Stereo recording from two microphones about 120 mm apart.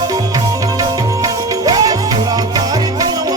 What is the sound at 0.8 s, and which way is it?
Music, 30° right (ahead or behind).